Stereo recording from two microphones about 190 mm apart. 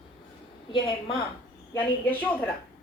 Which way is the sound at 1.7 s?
10° left (ahead or behind).